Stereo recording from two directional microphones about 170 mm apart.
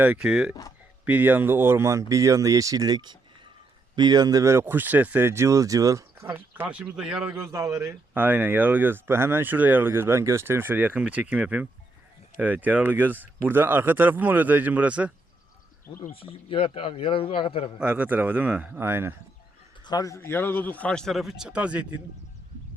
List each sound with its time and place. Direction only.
0.0 s a man's voice: 5° right (ahead or behind)
16.1 s a man's voice: 35° left (ahead or behind)
17.7 s speech: 10° right (ahead or behind)
19.8 s a man's voice: 20° left (ahead or behind); by 22.0 s 5° right (ahead or behind)